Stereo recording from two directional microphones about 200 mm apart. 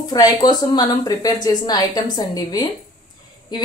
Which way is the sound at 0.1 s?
20° left (ahead or behind).